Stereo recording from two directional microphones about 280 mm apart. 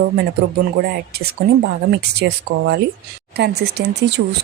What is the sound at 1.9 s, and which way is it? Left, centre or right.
Speech, right.